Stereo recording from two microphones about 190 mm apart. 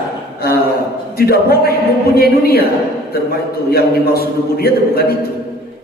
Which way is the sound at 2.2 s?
55° left (ahead or behind).